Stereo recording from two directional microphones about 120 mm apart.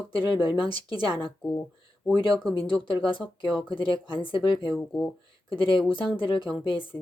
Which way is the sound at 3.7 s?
45° left (ahead or behind).